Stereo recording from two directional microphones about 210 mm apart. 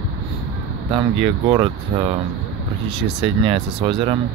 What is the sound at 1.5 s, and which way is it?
Speech, 20° right (ahead or behind).